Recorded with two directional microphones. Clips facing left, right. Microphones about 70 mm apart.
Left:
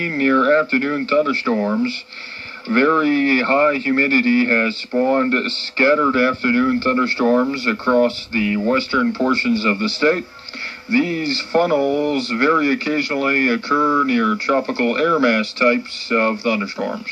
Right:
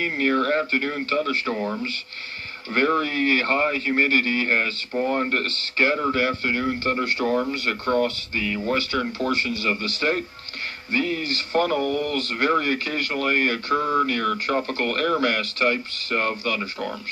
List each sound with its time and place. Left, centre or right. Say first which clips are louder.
0.0 s a sound: left 4 dB; centre
0.3 s speech: left 8 dB; left
7.5 s speech: left 6 dB; centre